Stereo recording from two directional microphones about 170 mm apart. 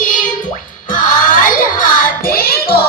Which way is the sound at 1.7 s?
60° left (ahead or behind).